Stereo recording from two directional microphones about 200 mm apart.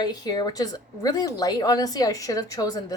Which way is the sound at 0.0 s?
20° left (ahead or behind).